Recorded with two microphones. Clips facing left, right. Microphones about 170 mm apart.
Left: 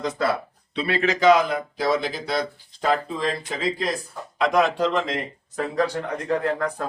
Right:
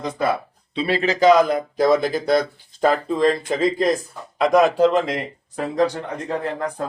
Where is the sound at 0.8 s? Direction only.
30° right (ahead or behind); by 3.8 s 45° right (ahead or behind).